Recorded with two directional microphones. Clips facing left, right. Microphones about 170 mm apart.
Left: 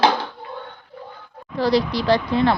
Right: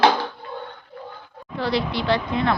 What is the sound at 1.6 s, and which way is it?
Speech, 40° left (ahead or behind).